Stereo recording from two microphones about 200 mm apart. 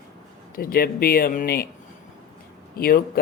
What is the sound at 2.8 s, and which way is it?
Speech, 50° left (ahead or behind).